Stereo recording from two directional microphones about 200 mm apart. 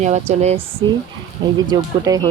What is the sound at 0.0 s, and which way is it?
Speech, 35° right (ahead or behind).